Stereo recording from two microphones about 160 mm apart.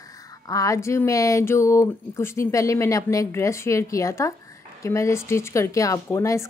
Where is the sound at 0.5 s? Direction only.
20° left (ahead or behind).